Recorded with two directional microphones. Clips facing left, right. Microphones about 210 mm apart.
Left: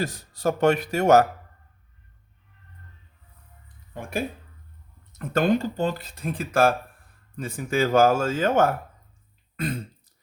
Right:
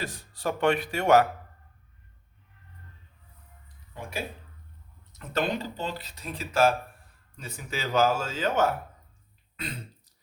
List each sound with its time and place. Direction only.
0.0 s speech: 40° left (ahead or behind)
5.1 s speech: 50° left (ahead or behind)
9.6 s throat clearing: 50° left (ahead or behind)